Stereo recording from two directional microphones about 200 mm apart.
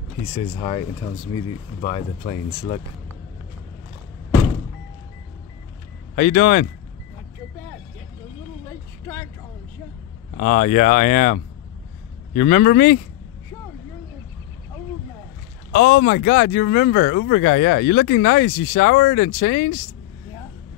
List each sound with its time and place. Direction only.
0.6 s speech: 25° left (ahead or behind)
6.1 s speech: 45° left (ahead or behind)
9.0 s speech: 15° left (ahead or behind)
10.4 s speech: 40° left (ahead or behind)
15.7 s speech: 50° left (ahead or behind)